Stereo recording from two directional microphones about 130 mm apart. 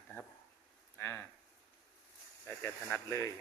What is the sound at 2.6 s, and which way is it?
Speech, 20° left (ahead or behind).